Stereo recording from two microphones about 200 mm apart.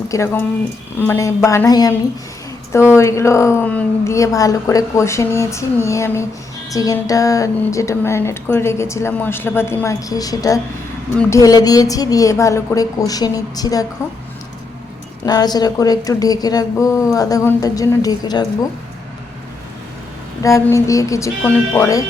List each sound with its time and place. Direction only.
0.1 s speech: 15° left (ahead or behind)
15.3 s speech: 20° left (ahead or behind)
20.4 s speech: 15° left (ahead or behind)